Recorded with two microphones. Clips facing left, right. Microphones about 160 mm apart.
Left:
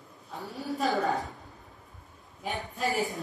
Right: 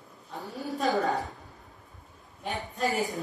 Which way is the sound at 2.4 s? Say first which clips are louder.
Right 2 dB; centre (ahead or behind).